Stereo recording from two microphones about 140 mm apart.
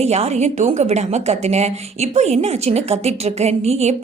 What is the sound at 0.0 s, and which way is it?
A woman's voice, 50° right (ahead or behind).